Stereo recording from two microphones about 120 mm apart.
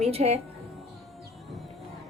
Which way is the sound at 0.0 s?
60° right (ahead or behind).